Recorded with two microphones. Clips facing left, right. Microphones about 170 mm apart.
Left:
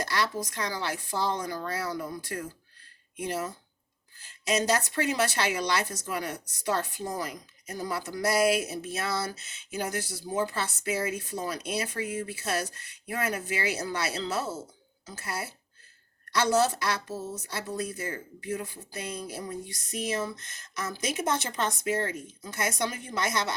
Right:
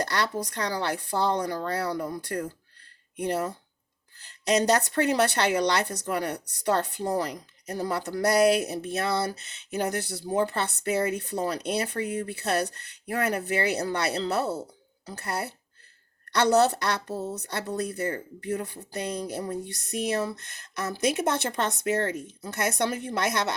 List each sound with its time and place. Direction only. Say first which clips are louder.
0.0 s speech: right 2 dB; 65° right (ahead or behind)
4.6 s speech: right 4 dB; 65° right (ahead or behind)